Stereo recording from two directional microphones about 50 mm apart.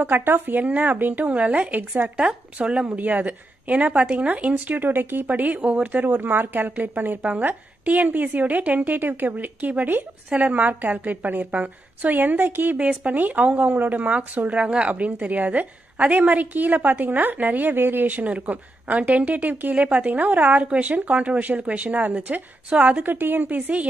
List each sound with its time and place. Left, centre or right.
0.0 s a woman's voice: right
2.1 s speech: right
3.0 s a woman's voice: right
6.0 s a woman's voice: right
7.2 s a woman's voice: right
12.7 s a woman's voice: right
18.0 s a woman's voice: right
23.0 s a woman's voice: right